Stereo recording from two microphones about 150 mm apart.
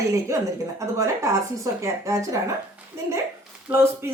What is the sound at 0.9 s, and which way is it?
A woman's voice, 20° right (ahead or behind).